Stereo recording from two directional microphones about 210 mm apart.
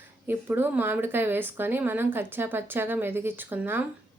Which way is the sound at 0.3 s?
10° right (ahead or behind).